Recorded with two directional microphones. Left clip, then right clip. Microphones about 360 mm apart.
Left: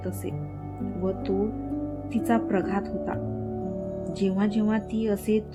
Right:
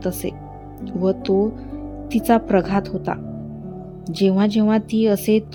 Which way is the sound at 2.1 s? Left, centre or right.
Right.